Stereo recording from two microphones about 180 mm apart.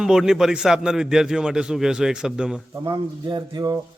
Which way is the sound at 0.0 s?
5° right (ahead or behind).